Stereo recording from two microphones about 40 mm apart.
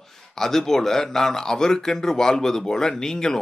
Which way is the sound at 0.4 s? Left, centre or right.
Centre.